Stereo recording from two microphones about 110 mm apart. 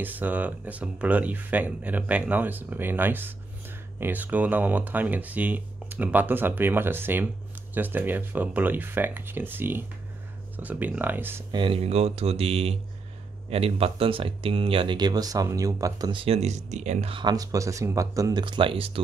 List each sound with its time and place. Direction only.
0.0 s speech: 15° right (ahead or behind)
11.5 s speech: 50° right (ahead or behind)
11.8 s speech: 75° right (ahead or behind); by 16.1 s 30° right (ahead or behind)
16.1 s speech: 50° right (ahead or behind)
16.3 s speech: 90° right
17.1 s speech: 40° right (ahead or behind)
18.4 s speech: 50° right (ahead or behind)